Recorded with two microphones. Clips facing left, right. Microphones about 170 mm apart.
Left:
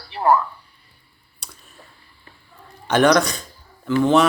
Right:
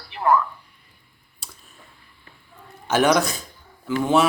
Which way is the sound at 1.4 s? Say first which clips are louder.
Left 1 dB; centre (ahead or behind).